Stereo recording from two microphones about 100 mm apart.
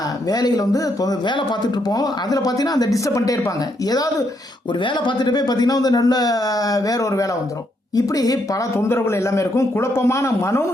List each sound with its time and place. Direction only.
0.3 s speech: 40° left (ahead or behind)
1.2 s speech: 50° left (ahead or behind)
4.8 s speech: 50° left (ahead or behind)
8.7 s a man's voice: 25° left (ahead or behind)